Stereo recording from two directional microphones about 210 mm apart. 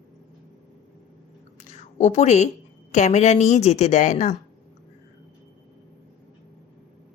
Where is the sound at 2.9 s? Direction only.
35° left (ahead or behind).